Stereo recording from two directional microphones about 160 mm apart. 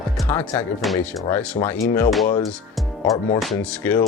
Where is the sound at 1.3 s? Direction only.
10° left (ahead or behind).